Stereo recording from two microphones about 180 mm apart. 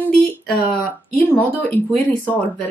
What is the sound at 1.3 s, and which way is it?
Speech, 10° left (ahead or behind).